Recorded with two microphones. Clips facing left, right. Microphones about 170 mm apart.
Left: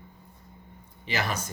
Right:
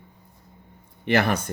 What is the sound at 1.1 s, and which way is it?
Speech, 60° right (ahead or behind).